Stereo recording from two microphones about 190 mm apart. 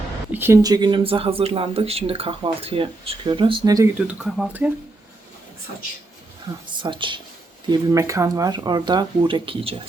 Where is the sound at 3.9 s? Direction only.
5° right (ahead or behind).